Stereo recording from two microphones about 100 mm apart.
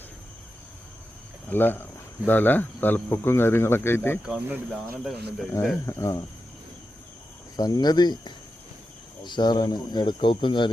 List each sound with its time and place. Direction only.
1.5 s speech: 20° left (ahead or behind)
4.3 s speech: 15° right (ahead or behind)
4.7 s speech: centre (ahead or behind)
5.8 s speech: 30° left (ahead or behind)
7.5 s speech: 40° left (ahead or behind)